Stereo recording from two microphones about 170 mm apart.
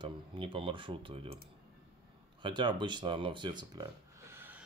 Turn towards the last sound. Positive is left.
turn(degrees=-10)  # may be behind; listen again after turning